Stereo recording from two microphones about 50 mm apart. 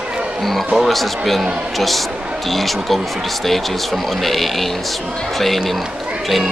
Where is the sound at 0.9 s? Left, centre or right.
Centre.